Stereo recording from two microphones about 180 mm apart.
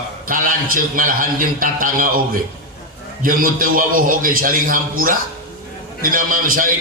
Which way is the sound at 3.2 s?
50° right (ahead or behind).